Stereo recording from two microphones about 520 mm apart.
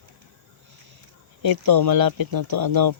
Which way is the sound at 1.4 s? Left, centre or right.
Right.